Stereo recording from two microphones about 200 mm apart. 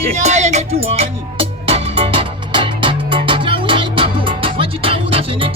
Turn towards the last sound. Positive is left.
turn(degrees=-25)  # may be behind; listen again after turning